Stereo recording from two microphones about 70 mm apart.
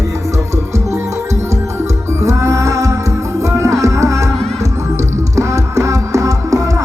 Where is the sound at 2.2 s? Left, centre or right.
Right.